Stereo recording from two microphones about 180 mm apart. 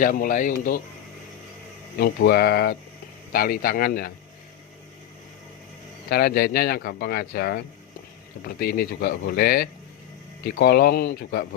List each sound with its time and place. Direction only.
0.0 s speech: 50° left (ahead or behind)
2.0 s speech: 60° left (ahead or behind)
6.1 s speech: 60° left (ahead or behind)